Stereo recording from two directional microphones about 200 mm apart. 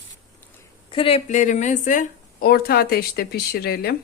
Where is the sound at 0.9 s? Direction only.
30° left (ahead or behind); by 4.0 s 50° left (ahead or behind).